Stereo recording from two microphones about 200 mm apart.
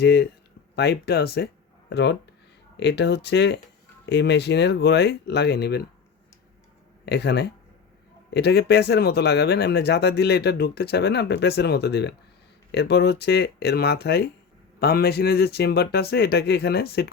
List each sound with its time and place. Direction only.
0.0 s speech: 55° left (ahead or behind)
7.0 s speech: 55° left (ahead or behind)